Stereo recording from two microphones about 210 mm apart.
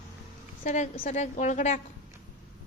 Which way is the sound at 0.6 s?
35° left (ahead or behind).